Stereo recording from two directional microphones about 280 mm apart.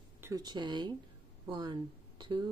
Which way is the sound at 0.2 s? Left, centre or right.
Centre.